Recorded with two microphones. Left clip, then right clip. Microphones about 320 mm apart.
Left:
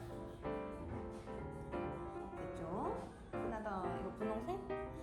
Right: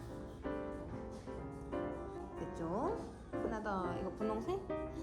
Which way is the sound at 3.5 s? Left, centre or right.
Centre.